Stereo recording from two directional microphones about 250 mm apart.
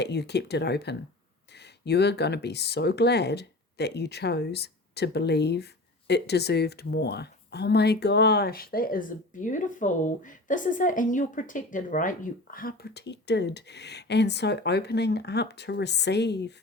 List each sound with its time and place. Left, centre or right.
0.0 s speech: left